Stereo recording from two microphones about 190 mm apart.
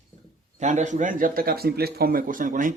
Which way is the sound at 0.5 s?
40° right (ahead or behind).